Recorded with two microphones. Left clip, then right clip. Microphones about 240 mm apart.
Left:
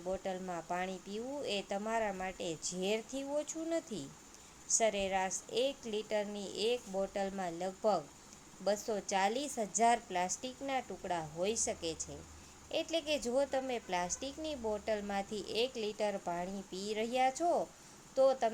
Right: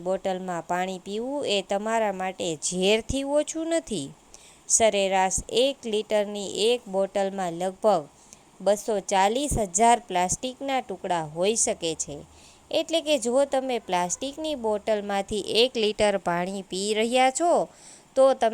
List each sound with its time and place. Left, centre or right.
0.0 s a woman's voice: right